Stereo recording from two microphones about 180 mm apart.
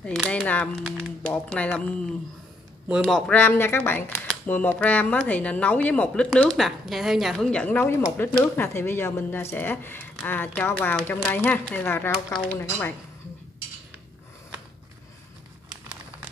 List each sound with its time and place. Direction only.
0.0 s speech: 5° left (ahead or behind)
3.0 s speech: 5° left (ahead or behind)
12.5 s speech: 15° left (ahead or behind)